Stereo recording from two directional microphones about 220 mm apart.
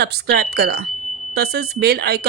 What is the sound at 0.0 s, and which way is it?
A woman's voice, 45° right (ahead or behind).